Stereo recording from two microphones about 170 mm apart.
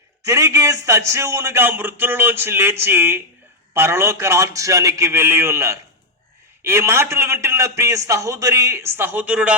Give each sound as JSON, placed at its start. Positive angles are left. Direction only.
{"t": 0.3, "sound": "a man's voice", "side_deg": -15}